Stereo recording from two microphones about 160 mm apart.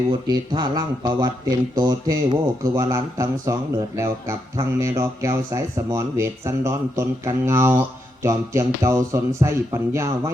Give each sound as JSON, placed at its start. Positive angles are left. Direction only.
{"t": 0.1, "sound": "speech", "side_deg": -25}